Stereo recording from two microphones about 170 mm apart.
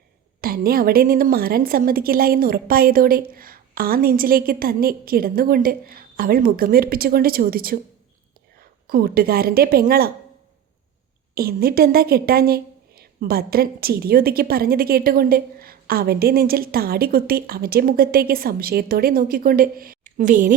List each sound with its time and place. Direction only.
0.4 s a woman's voice: 60° right (ahead or behind)
8.9 s a woman's voice: 60° right (ahead or behind)
11.3 s a woman's voice: 65° right (ahead or behind)